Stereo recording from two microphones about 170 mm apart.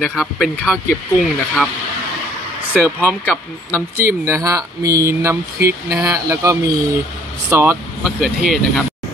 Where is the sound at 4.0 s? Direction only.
15° right (ahead or behind).